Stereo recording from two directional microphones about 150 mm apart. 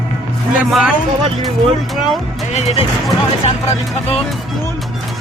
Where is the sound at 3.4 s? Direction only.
40° left (ahead or behind).